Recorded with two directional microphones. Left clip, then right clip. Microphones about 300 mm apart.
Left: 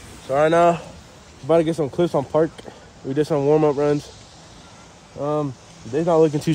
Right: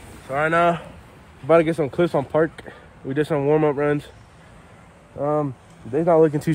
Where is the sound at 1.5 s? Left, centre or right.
Centre.